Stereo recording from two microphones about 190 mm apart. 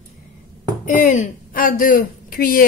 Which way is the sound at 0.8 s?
40° left (ahead or behind).